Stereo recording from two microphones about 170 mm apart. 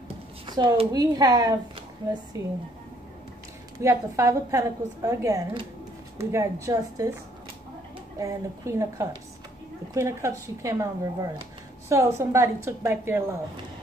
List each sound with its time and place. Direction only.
0.5 s a woman's voice: 25° right (ahead or behind)
3.8 s a woman's voice: 15° right (ahead or behind)
8.2 s a woman's voice: 20° right (ahead or behind)